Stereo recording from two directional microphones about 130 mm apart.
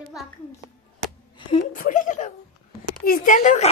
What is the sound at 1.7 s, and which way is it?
Speech, 85° left.